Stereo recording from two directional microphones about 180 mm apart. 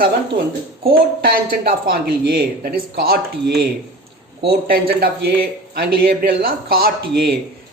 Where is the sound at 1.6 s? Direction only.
65° right (ahead or behind).